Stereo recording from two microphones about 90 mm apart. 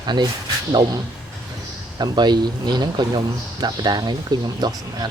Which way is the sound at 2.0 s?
50° right (ahead or behind).